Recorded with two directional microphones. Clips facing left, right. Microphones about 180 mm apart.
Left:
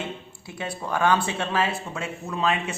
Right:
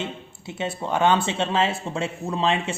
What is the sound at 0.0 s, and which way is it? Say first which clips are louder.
Speech: right 2 dB; 20° right (ahead or behind).